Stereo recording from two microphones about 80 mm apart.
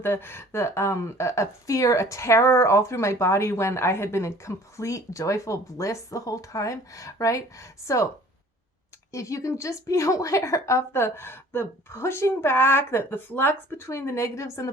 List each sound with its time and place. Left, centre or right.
0.0 s a woman's voice: left
9.1 s a woman's voice: left